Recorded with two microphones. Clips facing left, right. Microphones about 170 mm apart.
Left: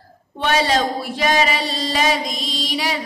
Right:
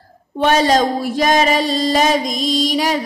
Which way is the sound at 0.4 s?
45° right (ahead or behind).